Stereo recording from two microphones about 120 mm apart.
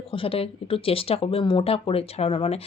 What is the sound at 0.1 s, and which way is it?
Speech, 50° left (ahead or behind).